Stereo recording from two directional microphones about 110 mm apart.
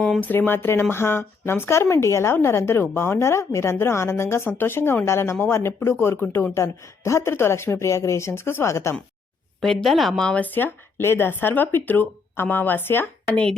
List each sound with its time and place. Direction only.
0.2 s speech: 15° left (ahead or behind)
9.6 s speech: centre (ahead or behind); by 13.4 s 20° left (ahead or behind)